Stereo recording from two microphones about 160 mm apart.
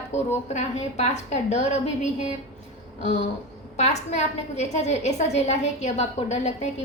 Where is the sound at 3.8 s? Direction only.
45° left (ahead or behind).